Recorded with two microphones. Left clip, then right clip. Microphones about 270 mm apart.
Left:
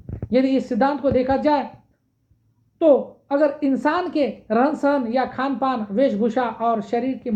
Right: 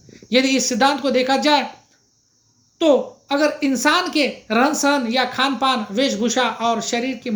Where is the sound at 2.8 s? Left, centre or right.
Right.